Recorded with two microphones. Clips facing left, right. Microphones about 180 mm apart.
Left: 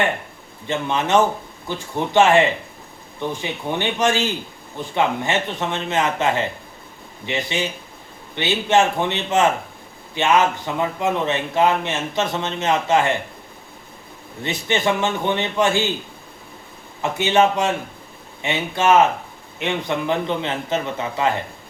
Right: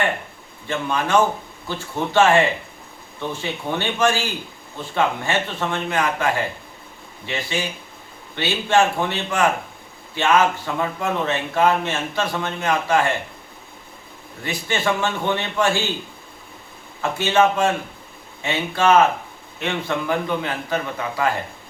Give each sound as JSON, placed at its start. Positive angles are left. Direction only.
{"t": 0.7, "sound": "speech", "side_deg": 20}
{"t": 14.4, "sound": "speech", "side_deg": 20}
{"t": 17.0, "sound": "speech", "side_deg": 20}